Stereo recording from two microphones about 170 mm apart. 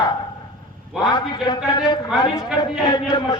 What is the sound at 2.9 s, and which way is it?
Speech, 25° left (ahead or behind).